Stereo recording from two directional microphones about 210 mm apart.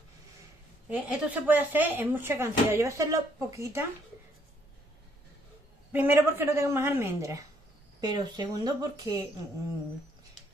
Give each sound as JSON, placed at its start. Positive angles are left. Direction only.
{"t": 0.8, "sound": "speech", "side_deg": -5}
{"t": 5.9, "sound": "speech", "side_deg": -10}